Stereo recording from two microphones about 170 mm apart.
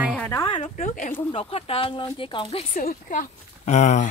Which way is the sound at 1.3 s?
35° left (ahead or behind).